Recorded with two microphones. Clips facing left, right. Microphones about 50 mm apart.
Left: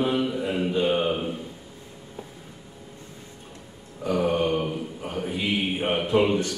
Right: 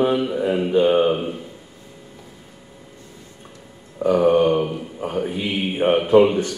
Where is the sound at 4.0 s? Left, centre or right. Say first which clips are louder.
Right 8 dB; right.